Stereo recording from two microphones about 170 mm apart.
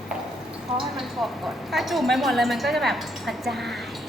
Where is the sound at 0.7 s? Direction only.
Centre (ahead or behind).